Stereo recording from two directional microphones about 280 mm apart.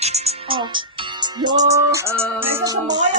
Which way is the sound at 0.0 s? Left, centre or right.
Right.